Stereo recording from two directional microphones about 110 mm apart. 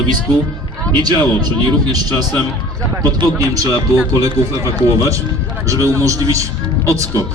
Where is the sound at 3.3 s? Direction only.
30° right (ahead or behind).